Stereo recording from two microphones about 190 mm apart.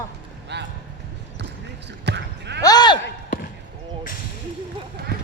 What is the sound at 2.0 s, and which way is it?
Basketball bounce, 65° right (ahead or behind).